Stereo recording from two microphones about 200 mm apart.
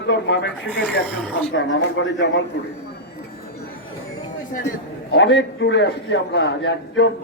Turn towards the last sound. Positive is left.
turn(degrees=60)  # may be behind; listen again after turning